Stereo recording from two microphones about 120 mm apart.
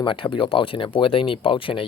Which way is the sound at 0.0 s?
45° left (ahead or behind).